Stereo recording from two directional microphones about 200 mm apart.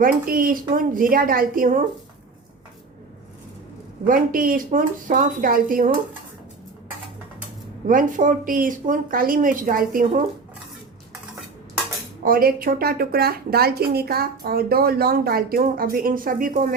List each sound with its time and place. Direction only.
0.0 s speech: 45° right (ahead or behind)
4.0 s speech: 45° right (ahead or behind)
7.9 s speech: 40° right (ahead or behind)
12.2 s speech: 45° right (ahead or behind)